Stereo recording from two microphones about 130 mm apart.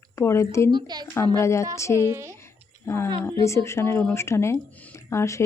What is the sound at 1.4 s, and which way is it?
Speech, 20° left (ahead or behind).